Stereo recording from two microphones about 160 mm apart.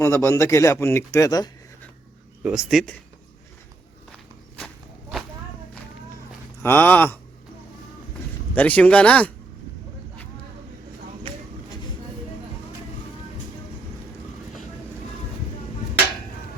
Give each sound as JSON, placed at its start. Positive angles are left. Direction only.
{"t": 0.0, "sound": "speech", "side_deg": 15}
{"t": 2.4, "sound": "speech", "side_deg": -5}
{"t": 6.6, "sound": "speech", "side_deg": 15}
{"t": 8.5, "sound": "speech", "side_deg": 10}